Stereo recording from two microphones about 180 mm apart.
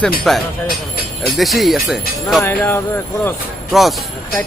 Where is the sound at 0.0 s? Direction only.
Centre (ahead or behind).